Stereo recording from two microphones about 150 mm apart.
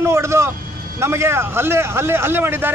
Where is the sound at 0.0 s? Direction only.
20° right (ahead or behind).